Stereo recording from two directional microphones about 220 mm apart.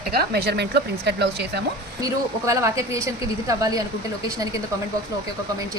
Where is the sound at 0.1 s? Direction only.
45° right (ahead or behind).